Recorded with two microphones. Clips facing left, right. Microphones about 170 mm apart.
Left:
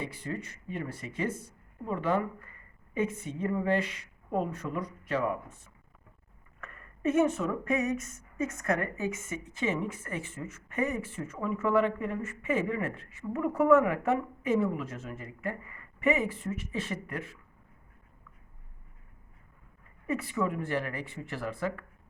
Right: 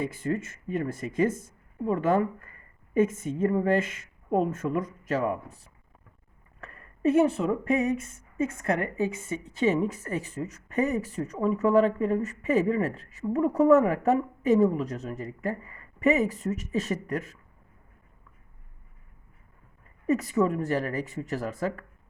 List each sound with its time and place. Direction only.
0.0 s speech: 45° right (ahead or behind)
20.1 s speech: 40° right (ahead or behind)